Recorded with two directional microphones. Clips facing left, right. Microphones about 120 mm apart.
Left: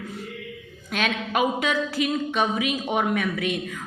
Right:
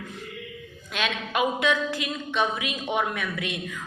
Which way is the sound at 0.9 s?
45° left (ahead or behind).